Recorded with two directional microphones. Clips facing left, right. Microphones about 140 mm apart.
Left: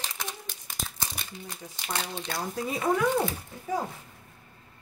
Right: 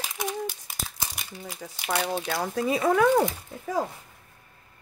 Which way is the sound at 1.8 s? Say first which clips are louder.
Right 7 dB; 60° right (ahead or behind).